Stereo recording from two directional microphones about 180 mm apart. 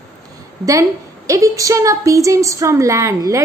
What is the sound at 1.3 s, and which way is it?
A woman's voice, 20° right (ahead or behind).